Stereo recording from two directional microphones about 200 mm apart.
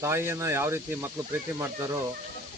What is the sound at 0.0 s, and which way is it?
Speech, 15° right (ahead or behind).